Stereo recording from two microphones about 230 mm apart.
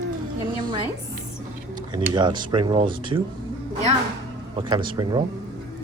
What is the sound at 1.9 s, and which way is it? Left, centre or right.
Speech, centre.